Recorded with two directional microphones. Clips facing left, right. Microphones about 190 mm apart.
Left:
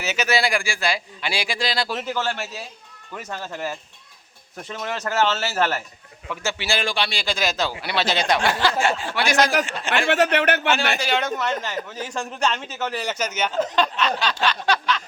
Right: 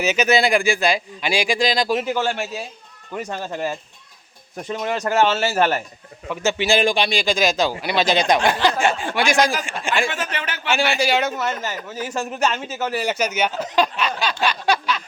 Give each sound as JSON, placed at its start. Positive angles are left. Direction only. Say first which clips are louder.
{"t": 0.0, "sound": "speech", "louder": "right 5 dB", "side_deg": -15}
{"t": 10.1, "sound": "speech", "louder": "left 9 dB", "side_deg": 65}
{"t": 10.9, "sound": "speech", "louder": "right 3 dB", "side_deg": -10}
{"t": 13.7, "sound": "a sound", "louder": "right 1 dB", "side_deg": -10}